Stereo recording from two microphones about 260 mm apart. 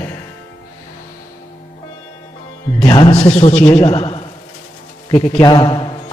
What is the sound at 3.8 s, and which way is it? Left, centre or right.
Speech, left.